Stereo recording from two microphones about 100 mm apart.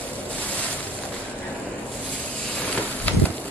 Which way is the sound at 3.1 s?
15° left (ahead or behind).